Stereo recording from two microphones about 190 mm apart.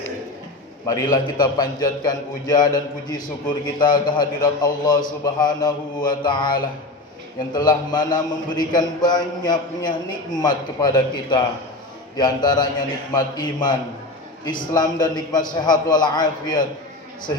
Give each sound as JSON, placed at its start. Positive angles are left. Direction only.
{"t": 0.9, "sound": "a man's voice", "side_deg": 15}